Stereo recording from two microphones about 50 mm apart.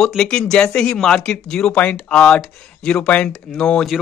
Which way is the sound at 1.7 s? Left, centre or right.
Left.